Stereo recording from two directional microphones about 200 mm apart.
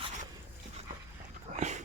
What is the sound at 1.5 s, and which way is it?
Dog, 35° right (ahead or behind).